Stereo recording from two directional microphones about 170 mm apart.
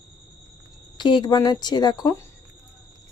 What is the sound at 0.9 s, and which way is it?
Speech, 25° left (ahead or behind).